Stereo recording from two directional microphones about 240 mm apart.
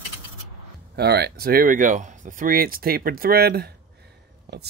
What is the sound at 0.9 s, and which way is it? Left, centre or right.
Speech, right.